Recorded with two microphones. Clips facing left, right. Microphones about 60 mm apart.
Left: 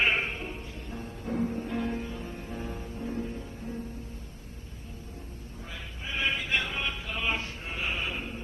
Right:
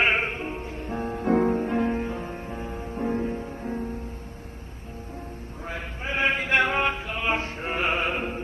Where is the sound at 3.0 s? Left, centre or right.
Right.